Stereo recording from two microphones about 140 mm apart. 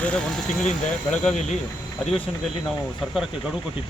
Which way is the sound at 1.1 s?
5° left (ahead or behind).